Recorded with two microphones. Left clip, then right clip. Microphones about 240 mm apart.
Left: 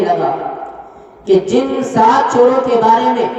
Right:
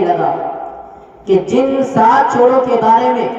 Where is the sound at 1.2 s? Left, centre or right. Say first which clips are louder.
Even; left.